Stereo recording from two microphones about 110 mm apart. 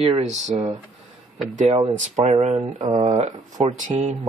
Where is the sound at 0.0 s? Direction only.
75° right (ahead or behind); by 0.7 s 90° right.